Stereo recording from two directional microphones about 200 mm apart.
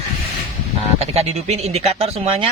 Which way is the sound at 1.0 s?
30° right (ahead or behind).